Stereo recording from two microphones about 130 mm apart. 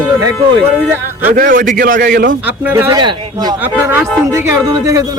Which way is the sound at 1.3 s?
90° right.